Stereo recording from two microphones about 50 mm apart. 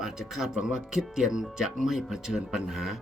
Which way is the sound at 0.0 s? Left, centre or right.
Centre.